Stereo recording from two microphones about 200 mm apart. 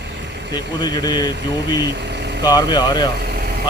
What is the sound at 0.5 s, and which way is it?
Speech, 20° left (ahead or behind).